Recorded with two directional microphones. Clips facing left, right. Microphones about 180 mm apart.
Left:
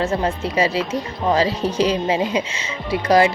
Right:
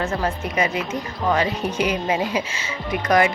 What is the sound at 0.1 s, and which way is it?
Speech, 25° left (ahead or behind).